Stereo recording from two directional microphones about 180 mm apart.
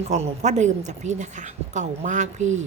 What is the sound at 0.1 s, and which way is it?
Speech, 40° right (ahead or behind).